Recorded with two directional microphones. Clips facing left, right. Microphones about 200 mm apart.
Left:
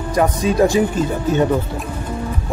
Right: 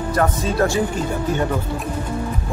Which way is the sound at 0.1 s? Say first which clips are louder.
Left 4 dB; 15° left (ahead or behind).